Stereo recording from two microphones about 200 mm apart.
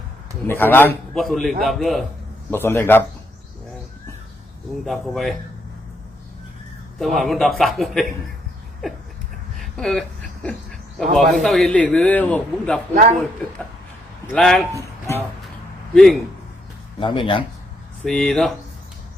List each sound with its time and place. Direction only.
0.4 s a man's voice: 10° left (ahead or behind)
2.5 s a man's voice: 10° left (ahead or behind)
4.9 s a man's voice: centre (ahead or behind)
7.0 s a man's voice: centre (ahead or behind)
9.6 s a sound: centre (ahead or behind)
10.9 s a man's voice: centre (ahead or behind)
12.9 s speech: 40° right (ahead or behind)
14.3 s a man's voice: centre (ahead or behind)
14.8 s speech: 15° left (ahead or behind)
16.0 s a man's voice: centre (ahead or behind)
17.0 s speech: 25° left (ahead or behind)
18.0 s a man's voice: 5° left (ahead or behind)